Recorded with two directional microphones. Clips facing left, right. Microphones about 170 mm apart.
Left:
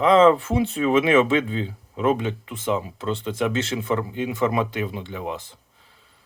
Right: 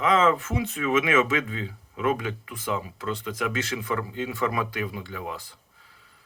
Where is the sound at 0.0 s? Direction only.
30° left (ahead or behind).